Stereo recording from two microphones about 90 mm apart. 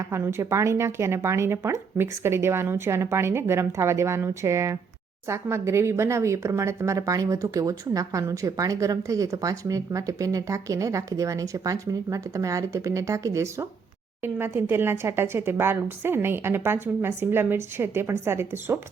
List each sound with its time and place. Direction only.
0.1 s speech: 30° right (ahead or behind)